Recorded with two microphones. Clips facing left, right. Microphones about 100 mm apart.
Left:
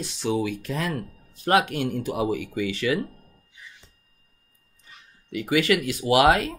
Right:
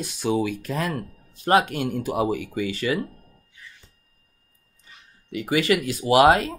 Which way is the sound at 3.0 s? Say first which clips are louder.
Even; 20° left (ahead or behind).